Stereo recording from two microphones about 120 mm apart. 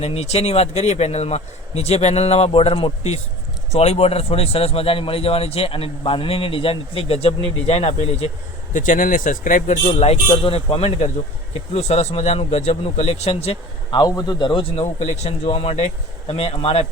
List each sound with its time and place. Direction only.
0.0 s a man's voice: 60° left (ahead or behind)
8.7 s speech: 90° left; by 10.2 s 70° left (ahead or behind)
10.2 s a man's voice: 45° left (ahead or behind); by 13.6 s 60° left (ahead or behind)
13.9 s a man's voice: 35° left (ahead or behind)
15.0 s speech: 70° left (ahead or behind)
15.4 s speech: 55° left (ahead or behind)